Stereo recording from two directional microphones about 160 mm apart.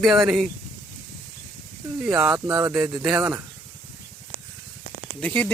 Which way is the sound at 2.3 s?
25° right (ahead or behind).